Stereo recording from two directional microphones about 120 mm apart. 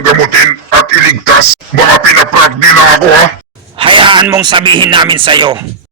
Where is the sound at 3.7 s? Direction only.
45° right (ahead or behind).